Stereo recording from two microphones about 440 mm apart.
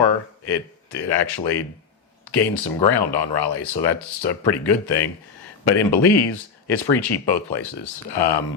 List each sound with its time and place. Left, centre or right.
0.0 s speech: left